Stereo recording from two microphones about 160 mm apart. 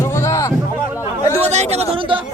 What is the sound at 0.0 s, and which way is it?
Music, 15° left (ahead or behind).